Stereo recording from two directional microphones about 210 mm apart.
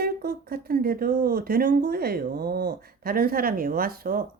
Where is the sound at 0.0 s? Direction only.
45° right (ahead or behind).